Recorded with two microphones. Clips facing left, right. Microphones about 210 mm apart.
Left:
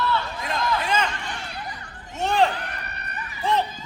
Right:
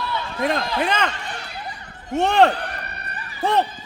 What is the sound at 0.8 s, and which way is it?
Speech, 60° right (ahead or behind).